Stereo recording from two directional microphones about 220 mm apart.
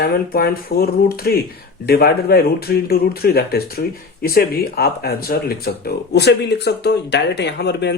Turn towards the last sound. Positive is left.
turn(degrees=50)  # may be behind; listen again after turning